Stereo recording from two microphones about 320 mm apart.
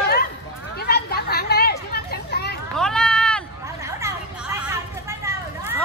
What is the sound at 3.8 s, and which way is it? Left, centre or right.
Vehicle, centre.